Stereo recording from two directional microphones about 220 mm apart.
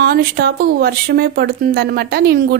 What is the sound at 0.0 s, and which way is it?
Speech, 45° right (ahead or behind).